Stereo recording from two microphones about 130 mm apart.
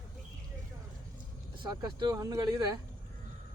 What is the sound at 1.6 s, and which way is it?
Speech, 35° right (ahead or behind).